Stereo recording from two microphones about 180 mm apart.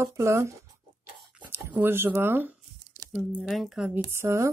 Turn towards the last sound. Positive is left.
turn(degrees=-15)  # may be behind; listen again after turning